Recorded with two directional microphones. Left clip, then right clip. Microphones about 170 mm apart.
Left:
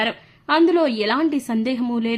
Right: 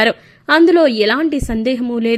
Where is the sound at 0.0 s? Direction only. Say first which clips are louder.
Right 9 dB; 30° right (ahead or behind).